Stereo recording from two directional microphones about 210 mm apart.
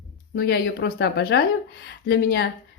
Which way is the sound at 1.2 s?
50° left (ahead or behind).